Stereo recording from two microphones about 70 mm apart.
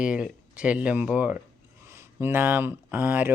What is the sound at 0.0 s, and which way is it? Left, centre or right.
Speech, centre.